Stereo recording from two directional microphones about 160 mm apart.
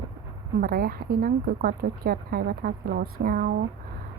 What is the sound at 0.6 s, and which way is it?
A woman's voice, 70° right (ahead or behind).